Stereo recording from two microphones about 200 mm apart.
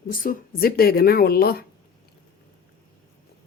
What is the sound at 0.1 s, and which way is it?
Speech, 45° left (ahead or behind).